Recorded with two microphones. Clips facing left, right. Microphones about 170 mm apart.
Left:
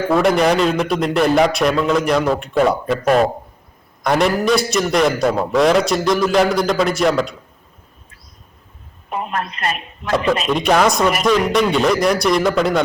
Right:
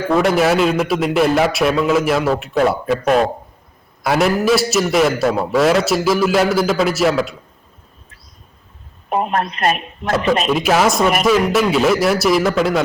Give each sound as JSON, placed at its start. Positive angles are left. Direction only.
{"t": 0.1, "sound": "a man's voice", "side_deg": 0}
{"t": 9.3, "sound": "speech", "side_deg": -40}
{"t": 10.5, "sound": "a man's voice", "side_deg": -5}